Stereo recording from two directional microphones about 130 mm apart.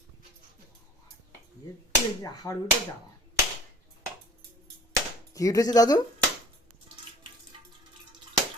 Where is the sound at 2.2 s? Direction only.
25° left (ahead or behind).